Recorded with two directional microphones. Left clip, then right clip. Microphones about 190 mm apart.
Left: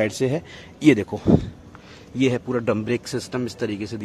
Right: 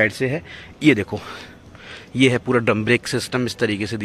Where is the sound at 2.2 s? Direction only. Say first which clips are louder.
Right 5 dB; 10° right (ahead or behind).